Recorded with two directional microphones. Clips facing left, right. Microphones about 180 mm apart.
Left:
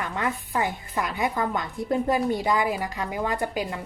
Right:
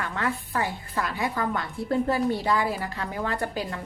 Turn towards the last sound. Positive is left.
turn(degrees=15)  # may be behind; listen again after turning